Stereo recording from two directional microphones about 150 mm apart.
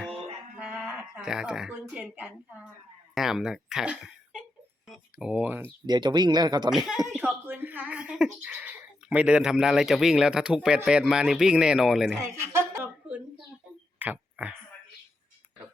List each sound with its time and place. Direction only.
0.6 s a woman's voice: 10° right (ahead or behind)
5.8 s speech: 30° right (ahead or behind)
6.7 s speech: centre (ahead or behind)
12.2 s speech: 15° right (ahead or behind)
14.0 s tick-tock: 10° right (ahead or behind)